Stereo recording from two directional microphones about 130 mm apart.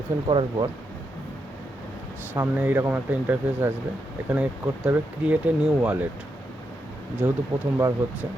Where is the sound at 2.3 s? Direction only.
15° right (ahead or behind).